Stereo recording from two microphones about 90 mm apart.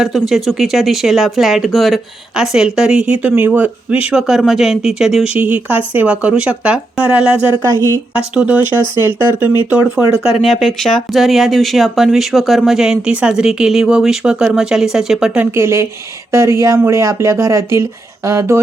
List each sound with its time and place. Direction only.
0.0 s speech: 5° right (ahead or behind)
4.1 s speech: 5° right (ahead or behind); by 9.5 s 25° right (ahead or behind)
10.2 s speech: 5° right (ahead or behind)
15.5 s speech: 30° right (ahead or behind)